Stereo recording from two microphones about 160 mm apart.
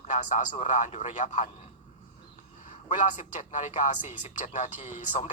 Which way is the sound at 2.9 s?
50° left (ahead or behind).